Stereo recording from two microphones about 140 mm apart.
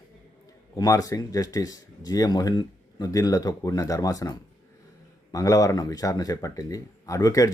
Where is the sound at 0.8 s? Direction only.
25° left (ahead or behind).